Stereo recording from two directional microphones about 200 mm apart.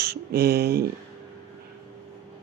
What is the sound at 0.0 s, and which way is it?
Speech, 50° right (ahead or behind).